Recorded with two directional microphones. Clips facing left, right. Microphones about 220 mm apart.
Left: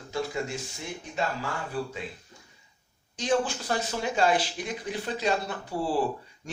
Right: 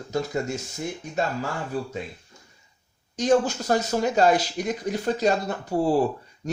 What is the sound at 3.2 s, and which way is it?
Speech, 45° right (ahead or behind).